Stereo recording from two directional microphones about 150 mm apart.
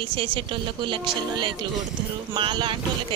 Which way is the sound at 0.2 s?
35° right (ahead or behind).